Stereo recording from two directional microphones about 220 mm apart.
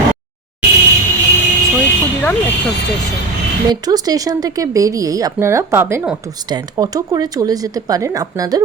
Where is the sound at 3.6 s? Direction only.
15° right (ahead or behind).